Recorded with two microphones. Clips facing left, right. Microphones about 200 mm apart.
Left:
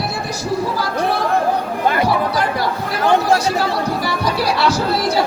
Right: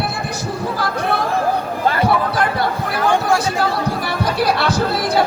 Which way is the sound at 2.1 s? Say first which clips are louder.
Even; 55° right (ahead or behind).